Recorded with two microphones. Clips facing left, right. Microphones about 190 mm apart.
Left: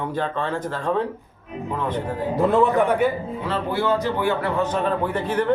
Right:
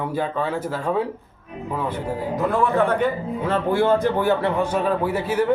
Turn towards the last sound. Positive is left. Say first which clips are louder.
# right 1 dB
turn(degrees=-10)  # may be behind; listen again after turning